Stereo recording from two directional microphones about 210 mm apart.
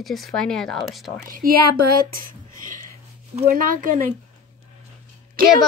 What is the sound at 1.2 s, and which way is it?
A woman's voice, 45° right (ahead or behind).